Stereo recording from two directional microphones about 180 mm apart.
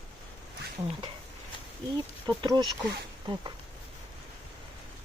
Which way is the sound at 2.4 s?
25° right (ahead or behind).